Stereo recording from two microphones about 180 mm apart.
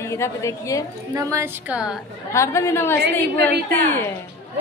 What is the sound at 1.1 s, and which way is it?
Speech, 15° right (ahead or behind).